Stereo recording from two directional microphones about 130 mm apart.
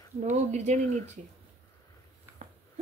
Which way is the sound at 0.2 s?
65° right (ahead or behind).